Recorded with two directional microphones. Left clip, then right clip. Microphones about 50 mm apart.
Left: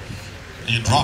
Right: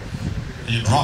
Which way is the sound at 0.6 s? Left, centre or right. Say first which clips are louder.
Left 2 dB; left.